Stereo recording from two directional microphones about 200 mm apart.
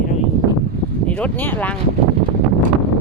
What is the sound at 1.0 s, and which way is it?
Speech, 5° left (ahead or behind).